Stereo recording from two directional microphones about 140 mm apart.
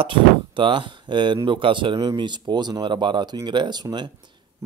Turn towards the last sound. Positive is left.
turn(degrees=-30)  # may be behind; listen again after turning